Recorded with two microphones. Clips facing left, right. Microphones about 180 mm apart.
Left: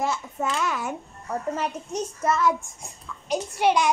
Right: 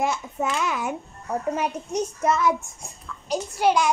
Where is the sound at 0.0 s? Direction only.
10° right (ahead or behind).